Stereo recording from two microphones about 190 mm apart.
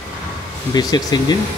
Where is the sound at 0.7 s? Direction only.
20° left (ahead or behind).